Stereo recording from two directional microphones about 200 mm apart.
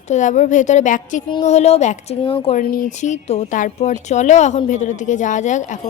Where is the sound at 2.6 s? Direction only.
45° left (ahead or behind).